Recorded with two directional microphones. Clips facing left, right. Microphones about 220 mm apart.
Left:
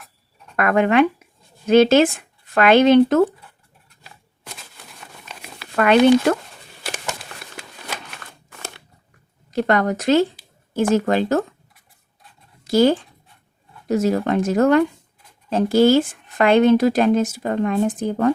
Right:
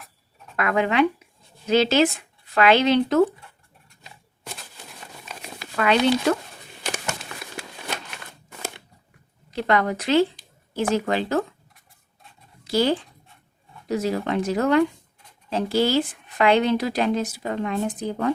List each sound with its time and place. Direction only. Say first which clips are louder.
0.5 s speech: left 5 dB; 50° left (ahead or behind)
5.7 s a woman's voice: left 7 dB; 55° left (ahead or behind)
9.5 s a woman's voice: left 3 dB; 45° left (ahead or behind)
12.6 s a woman's voice: left 6 dB; 45° left (ahead or behind)